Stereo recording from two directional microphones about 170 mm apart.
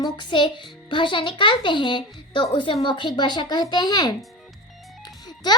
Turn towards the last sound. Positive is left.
turn(degrees=25)  # may be behind; listen again after turning